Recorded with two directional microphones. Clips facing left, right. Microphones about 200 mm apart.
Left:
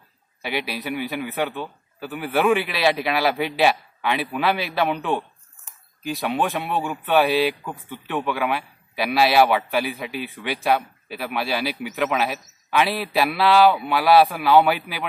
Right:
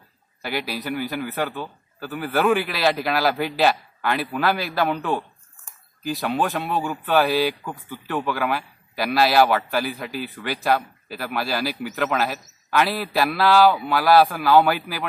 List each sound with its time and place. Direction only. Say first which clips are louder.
0.4 s speech: even; centre (ahead or behind)